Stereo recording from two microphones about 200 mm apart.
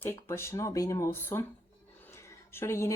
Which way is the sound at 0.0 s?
10° left (ahead or behind).